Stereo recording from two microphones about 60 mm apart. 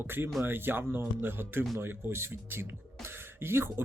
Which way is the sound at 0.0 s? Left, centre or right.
Right.